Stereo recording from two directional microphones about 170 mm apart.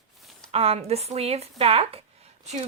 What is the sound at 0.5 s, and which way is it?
Speech, 35° right (ahead or behind).